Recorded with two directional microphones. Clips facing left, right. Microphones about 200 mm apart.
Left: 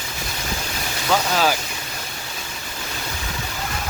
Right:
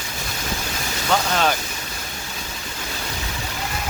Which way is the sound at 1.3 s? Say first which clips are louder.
Left 1 dB; 5° left (ahead or behind).